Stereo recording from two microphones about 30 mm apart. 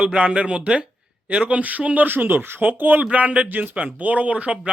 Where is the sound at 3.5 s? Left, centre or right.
Right.